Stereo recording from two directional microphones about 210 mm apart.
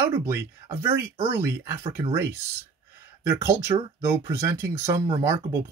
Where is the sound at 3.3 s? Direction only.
15° right (ahead or behind).